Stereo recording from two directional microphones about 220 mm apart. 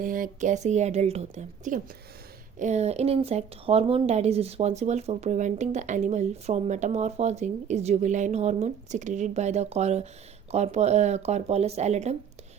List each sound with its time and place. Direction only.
0.0 s a woman's voice: 40° right (ahead or behind)